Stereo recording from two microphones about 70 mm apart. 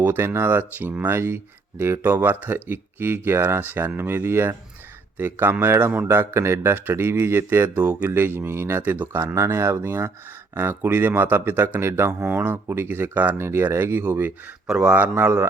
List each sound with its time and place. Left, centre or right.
0.0 s speech: right
7.8 s speech: right
12.2 s speech: right
12.5 s speech: right
14.7 s speech: centre